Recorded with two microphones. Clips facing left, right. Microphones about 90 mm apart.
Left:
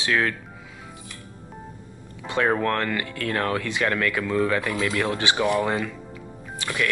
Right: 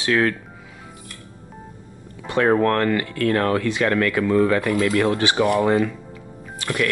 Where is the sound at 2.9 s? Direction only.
35° right (ahead or behind).